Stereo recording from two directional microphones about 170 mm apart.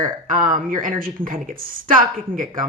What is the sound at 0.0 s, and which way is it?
Speech, 50° right (ahead or behind).